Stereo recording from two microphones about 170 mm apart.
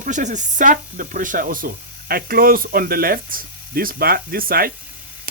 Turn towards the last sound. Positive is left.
turn(degrees=-60)  # may be behind; listen again after turning